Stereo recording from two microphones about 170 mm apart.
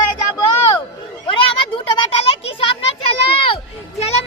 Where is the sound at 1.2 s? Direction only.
30° left (ahead or behind).